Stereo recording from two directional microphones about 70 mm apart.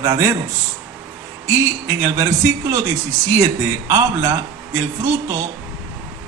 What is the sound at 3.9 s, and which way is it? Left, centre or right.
A man's voice, right.